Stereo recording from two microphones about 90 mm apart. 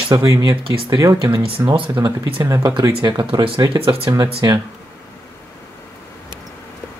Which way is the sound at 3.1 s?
65° right (ahead or behind).